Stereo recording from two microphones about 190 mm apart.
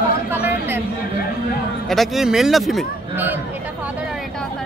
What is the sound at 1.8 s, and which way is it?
A man's voice, centre (ahead or behind).